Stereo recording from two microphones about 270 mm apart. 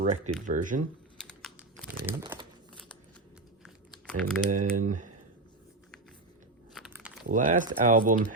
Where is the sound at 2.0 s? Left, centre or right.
Centre.